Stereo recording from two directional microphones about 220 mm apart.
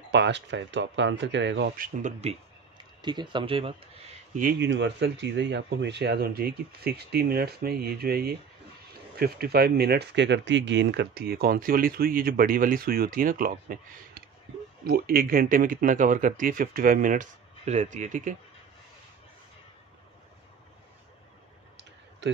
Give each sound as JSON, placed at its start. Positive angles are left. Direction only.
{"t": 0.1, "sound": "speech", "side_deg": -55}
{"t": 2.0, "sound": "speech", "side_deg": -35}
{"t": 3.0, "sound": "speech", "side_deg": -20}
{"t": 4.4, "sound": "speech", "side_deg": -45}
{"t": 14.9, "sound": "speech", "side_deg": -40}